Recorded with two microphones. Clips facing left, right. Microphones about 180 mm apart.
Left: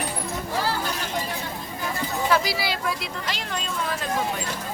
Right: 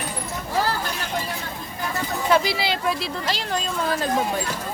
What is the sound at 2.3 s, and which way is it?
Speech, 25° right (ahead or behind).